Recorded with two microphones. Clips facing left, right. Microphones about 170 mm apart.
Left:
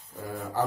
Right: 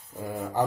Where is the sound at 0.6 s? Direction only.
20° right (ahead or behind).